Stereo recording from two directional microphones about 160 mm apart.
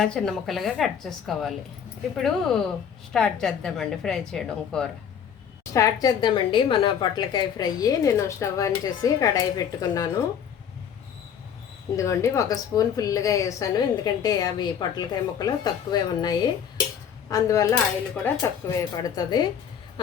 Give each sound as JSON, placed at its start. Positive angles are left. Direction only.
{"t": 0.0, "sound": "a woman's voice", "side_deg": 5}
{"t": 5.7, "sound": "a woman's voice", "side_deg": 20}
{"t": 11.9, "sound": "a woman's voice", "side_deg": 20}